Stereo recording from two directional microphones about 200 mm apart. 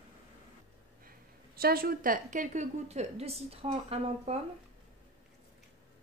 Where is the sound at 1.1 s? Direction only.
50° right (ahead or behind); by 4.4 s 30° right (ahead or behind).